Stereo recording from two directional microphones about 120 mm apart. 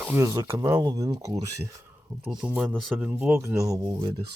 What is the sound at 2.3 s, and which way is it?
Speech, 10° right (ahead or behind).